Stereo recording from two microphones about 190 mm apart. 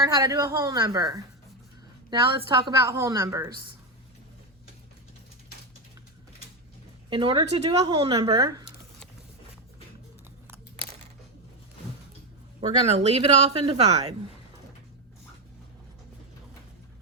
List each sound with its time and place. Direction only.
0.0 s a woman's voice: 20° right (ahead or behind)
7.1 s a woman's voice: 25° right (ahead or behind)
12.6 s speech: 35° right (ahead or behind)